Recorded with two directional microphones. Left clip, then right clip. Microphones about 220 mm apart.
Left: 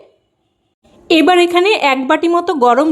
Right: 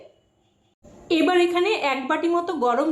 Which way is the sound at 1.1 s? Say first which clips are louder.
Left 9 dB; 45° left (ahead or behind).